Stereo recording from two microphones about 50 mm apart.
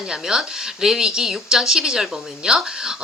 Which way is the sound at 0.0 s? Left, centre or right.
Centre.